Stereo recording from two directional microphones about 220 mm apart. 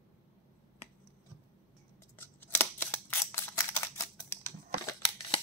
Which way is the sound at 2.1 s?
10° left (ahead or behind).